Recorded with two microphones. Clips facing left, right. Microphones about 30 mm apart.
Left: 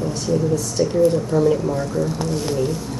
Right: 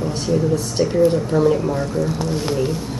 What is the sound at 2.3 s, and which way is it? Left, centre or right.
Speech, right.